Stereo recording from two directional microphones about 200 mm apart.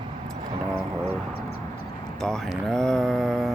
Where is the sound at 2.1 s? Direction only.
Centre (ahead or behind).